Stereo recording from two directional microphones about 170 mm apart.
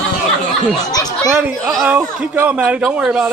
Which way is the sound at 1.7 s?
5° right (ahead or behind).